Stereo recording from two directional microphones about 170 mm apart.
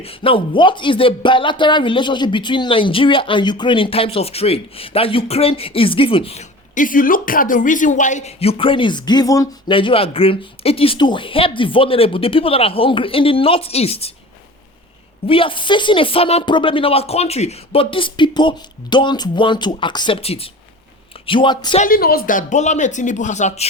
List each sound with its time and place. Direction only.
0.0 s speech: 35° left (ahead or behind)
6.7 s speech: 55° left (ahead or behind); by 9.7 s 20° left (ahead or behind)
9.7 s speech: 30° left (ahead or behind)
15.3 s speech: 30° left (ahead or behind)
21.8 s speech: 55° left (ahead or behind)